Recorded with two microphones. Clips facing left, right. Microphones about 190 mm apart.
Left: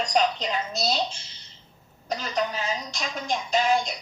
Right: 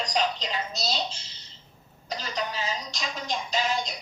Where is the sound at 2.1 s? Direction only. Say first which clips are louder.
Left 4 dB; 50° left (ahead or behind).